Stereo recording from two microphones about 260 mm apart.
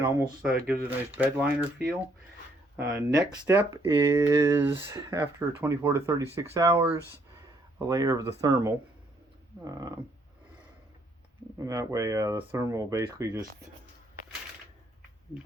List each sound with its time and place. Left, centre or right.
0.0 s speech: centre
2.7 s speech: centre
11.5 s speech: centre